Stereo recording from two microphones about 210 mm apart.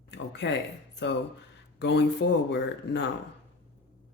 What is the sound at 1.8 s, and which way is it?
Speech, 55° left (ahead or behind).